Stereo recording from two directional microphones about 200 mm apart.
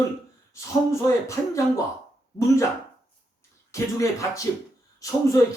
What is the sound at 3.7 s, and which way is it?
Speech, 15° left (ahead or behind).